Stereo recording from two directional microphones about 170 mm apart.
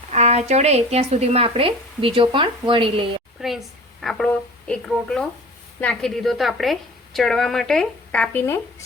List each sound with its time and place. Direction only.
0.1 s speech: 40° right (ahead or behind)
3.4 s a woman's voice: centre (ahead or behind)